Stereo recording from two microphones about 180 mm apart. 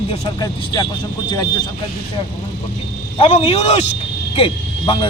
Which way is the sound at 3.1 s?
30° left (ahead or behind).